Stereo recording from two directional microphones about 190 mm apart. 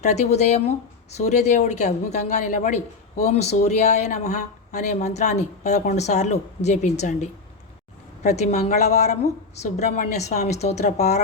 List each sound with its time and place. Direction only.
0.0 s speech: 35° left (ahead or behind)